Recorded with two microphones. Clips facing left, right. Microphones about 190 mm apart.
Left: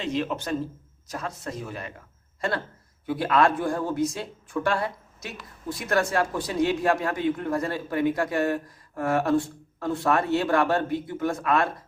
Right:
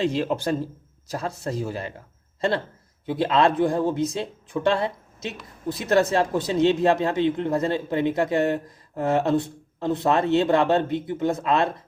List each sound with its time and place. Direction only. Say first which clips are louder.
0.0 s speech: right 5 dB; 35° right (ahead or behind)
3.1 s speech: right 2 dB; 25° right (ahead or behind)